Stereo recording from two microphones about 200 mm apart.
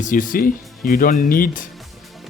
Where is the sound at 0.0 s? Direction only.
40° left (ahead or behind).